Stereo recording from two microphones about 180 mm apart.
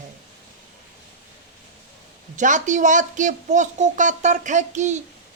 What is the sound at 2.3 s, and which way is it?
Speech, 45° right (ahead or behind).